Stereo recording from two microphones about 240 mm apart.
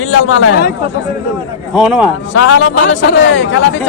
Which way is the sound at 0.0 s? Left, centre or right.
Left.